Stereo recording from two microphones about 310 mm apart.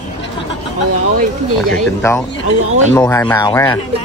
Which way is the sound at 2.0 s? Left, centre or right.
Centre.